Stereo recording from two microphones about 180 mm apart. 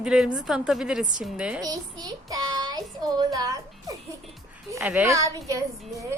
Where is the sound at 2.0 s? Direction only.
20° right (ahead or behind).